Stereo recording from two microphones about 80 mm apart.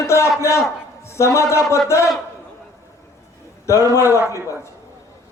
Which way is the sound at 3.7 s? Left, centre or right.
Left.